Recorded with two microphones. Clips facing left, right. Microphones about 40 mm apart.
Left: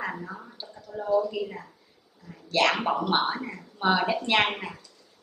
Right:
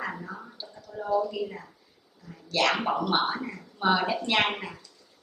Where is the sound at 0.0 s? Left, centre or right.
Centre.